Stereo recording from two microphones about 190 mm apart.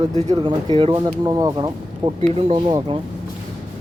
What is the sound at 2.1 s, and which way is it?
Speech, 30° right (ahead or behind).